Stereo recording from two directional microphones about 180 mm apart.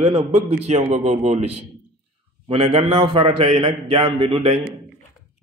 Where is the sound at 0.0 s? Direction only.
35° right (ahead or behind).